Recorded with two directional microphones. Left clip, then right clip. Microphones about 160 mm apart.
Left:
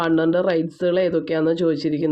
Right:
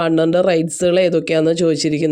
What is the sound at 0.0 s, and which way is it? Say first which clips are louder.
Speech: right 4 dB; 50° right (ahead or behind).